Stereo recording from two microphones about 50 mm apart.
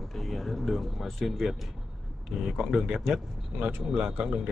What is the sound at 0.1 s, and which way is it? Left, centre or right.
Speech, centre.